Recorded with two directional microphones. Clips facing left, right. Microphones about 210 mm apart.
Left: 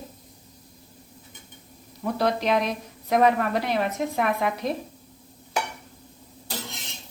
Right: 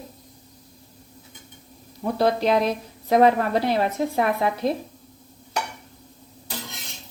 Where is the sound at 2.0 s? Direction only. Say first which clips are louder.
Right 3 dB; 30° right (ahead or behind).